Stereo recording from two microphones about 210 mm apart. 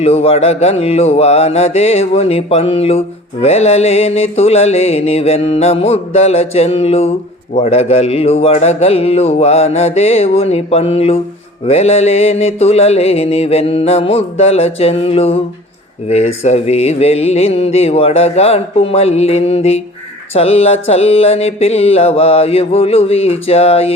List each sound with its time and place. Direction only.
0.0 s mantra: 30° left (ahead or behind)